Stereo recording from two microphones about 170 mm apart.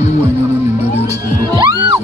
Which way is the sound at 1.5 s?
25° right (ahead or behind).